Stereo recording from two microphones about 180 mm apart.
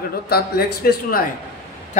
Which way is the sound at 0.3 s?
60° left (ahead or behind).